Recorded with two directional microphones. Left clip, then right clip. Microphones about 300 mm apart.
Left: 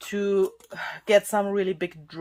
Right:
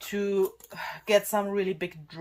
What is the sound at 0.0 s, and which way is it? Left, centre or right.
Speech, left.